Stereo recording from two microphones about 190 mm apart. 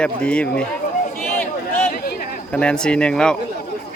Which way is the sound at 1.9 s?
50° left (ahead or behind).